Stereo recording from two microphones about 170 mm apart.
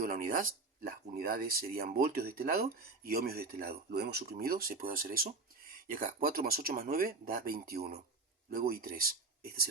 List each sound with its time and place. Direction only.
0.0 s speech: 55° right (ahead or behind)